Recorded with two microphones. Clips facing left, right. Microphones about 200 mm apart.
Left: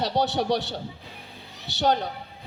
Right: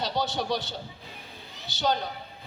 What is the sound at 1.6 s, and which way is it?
Speech, 70° left (ahead or behind).